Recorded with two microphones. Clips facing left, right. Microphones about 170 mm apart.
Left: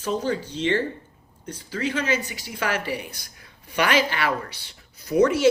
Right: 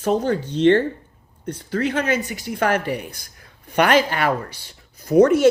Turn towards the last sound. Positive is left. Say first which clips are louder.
# right 5 dB
turn(degrees=-50)  # may be behind; listen again after turning